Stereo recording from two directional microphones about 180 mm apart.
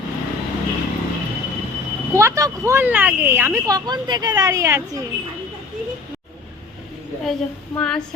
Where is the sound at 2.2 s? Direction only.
15° right (ahead or behind).